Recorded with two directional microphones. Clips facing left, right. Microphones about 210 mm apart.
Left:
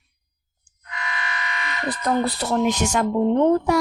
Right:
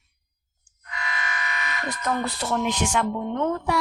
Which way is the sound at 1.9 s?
35° left (ahead or behind).